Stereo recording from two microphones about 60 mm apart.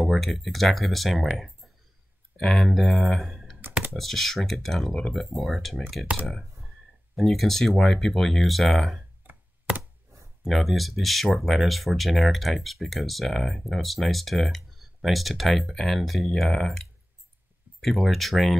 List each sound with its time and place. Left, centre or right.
0.0 s speech: centre
2.3 s speech: centre
10.4 s speech: centre